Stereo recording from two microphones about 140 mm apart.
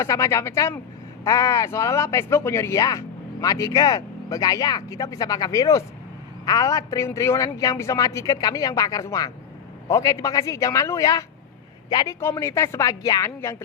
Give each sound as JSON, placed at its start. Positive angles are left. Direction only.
{"t": 0.0, "sound": "a man's voice", "side_deg": 20}
{"t": 12.2, "sound": "a man's voice", "side_deg": 20}